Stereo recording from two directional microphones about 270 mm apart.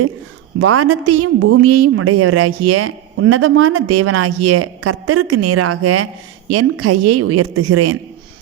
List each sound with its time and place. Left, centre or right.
0.6 s a woman's voice: right